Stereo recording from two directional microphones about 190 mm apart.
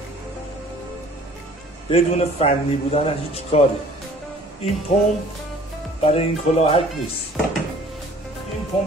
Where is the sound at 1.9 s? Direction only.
30° left (ahead or behind).